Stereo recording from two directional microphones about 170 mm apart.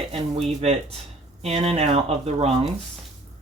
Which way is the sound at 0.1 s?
35° right (ahead or behind).